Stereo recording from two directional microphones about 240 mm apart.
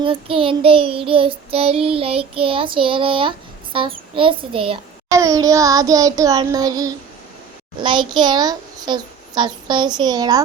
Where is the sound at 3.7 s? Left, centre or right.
Right.